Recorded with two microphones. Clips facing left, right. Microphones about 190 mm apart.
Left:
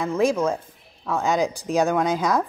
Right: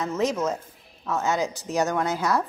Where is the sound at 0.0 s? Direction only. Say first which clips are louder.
Left 4 dB; 10° left (ahead or behind).